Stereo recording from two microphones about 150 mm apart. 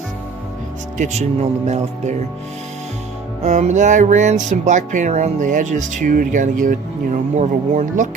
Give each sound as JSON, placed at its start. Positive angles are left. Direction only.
{"t": 0.9, "sound": "speech", "side_deg": -50}
{"t": 3.4, "sound": "speech", "side_deg": -50}